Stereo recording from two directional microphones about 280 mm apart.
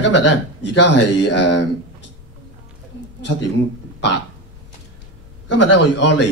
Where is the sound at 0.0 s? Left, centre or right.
Left.